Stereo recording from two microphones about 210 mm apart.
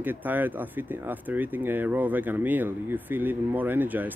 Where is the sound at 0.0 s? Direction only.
10° right (ahead or behind).